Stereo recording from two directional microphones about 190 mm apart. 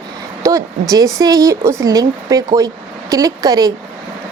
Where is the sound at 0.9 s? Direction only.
20° right (ahead or behind).